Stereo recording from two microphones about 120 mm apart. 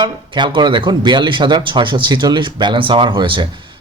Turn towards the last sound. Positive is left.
turn(degrees=-40)  # may be behind; listen again after turning